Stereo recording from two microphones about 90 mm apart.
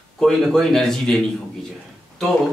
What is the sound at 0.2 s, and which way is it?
Speech, 5° left (ahead or behind).